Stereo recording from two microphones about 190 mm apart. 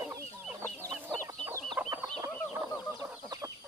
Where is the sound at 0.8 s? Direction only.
15° right (ahead or behind).